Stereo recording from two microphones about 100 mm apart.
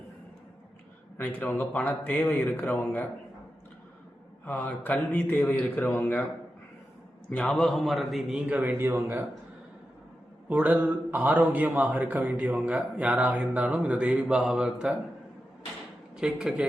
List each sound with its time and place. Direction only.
1.2 s speech: 20° left (ahead or behind)
4.4 s a man's voice: 20° left (ahead or behind)
7.3 s a man's voice: 10° left (ahead or behind)
8.4 s a man's voice: 15° right (ahead or behind)
8.8 s speech: 25° right (ahead or behind)
10.5 s a man's voice: 15° right (ahead or behind)
16.1 s a man's voice: 5° right (ahead or behind)